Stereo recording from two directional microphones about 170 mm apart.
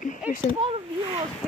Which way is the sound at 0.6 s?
30° right (ahead or behind).